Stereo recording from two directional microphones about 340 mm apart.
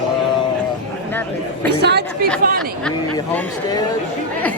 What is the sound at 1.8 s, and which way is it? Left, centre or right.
Speech, right.